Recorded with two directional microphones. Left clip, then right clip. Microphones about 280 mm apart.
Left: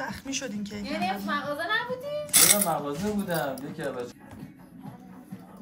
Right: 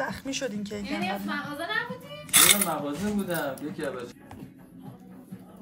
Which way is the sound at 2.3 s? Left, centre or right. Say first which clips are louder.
Right 3 dB; centre.